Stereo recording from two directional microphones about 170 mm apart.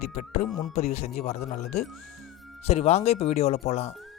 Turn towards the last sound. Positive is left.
turn(degrees=40)  # may be behind; listen again after turning